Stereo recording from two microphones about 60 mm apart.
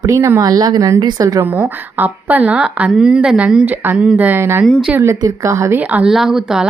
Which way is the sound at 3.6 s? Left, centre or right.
Right.